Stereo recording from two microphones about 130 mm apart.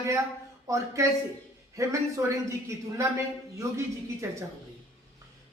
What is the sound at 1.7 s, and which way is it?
A man's voice, 25° right (ahead or behind).